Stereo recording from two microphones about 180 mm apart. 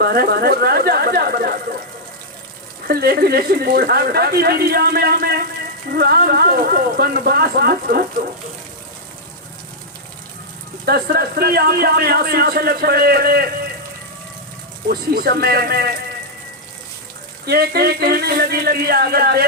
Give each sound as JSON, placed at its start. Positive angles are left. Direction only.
{"t": 0.0, "sound": "a man's voice", "side_deg": -60}
{"t": 2.8, "sound": "a man's voice", "side_deg": -60}
{"t": 10.8, "sound": "a man's voice", "side_deg": -60}
{"t": 14.8, "sound": "a man's voice", "side_deg": -55}
{"t": 17.4, "sound": "a man's voice", "side_deg": -60}